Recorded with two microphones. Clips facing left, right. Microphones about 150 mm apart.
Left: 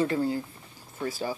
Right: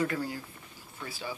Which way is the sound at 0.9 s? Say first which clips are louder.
Left 8 dB; 40° left (ahead or behind).